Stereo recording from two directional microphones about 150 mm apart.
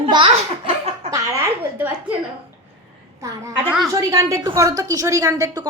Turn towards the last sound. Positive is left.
turn(degrees=-25)  # may be behind; listen again after turning